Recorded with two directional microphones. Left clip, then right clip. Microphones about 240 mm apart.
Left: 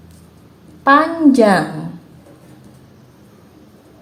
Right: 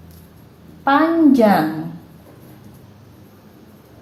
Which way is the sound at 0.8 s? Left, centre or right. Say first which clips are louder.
Left 3 dB; left.